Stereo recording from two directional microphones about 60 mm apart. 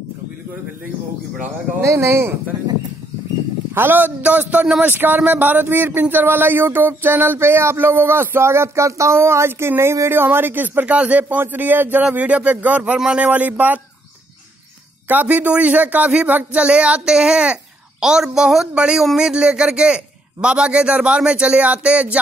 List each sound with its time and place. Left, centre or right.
1.8 s speech: right
3.7 s speech: right
4.2 s speech: right
4.8 s speech: right
15.0 s a man's voice: right